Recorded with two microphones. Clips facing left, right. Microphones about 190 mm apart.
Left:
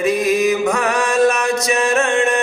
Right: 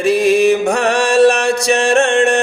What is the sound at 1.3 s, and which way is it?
Music, 75° right (ahead or behind).